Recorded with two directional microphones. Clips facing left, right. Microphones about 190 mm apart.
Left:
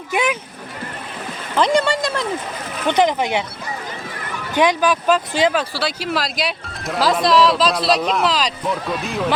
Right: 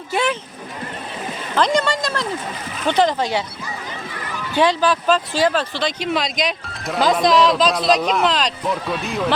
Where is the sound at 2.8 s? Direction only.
20° left (ahead or behind).